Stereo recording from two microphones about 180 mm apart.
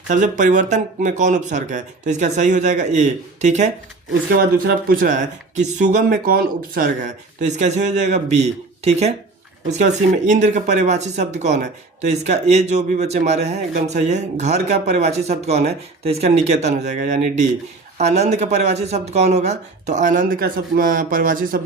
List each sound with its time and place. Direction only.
0.1 s speech: 45° right (ahead or behind)
4.3 s speech: 50° right (ahead or behind)